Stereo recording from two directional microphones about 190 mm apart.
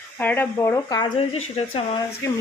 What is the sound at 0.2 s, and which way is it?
Speech, 10° left (ahead or behind).